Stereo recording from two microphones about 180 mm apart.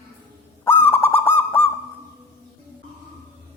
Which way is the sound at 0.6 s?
10° left (ahead or behind).